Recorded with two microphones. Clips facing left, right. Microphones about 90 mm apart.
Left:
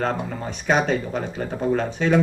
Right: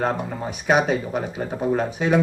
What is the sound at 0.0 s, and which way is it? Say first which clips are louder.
Speech: right 1 dB; 10° right (ahead or behind).